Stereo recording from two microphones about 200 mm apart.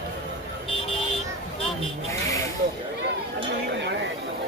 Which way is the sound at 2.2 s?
15° left (ahead or behind).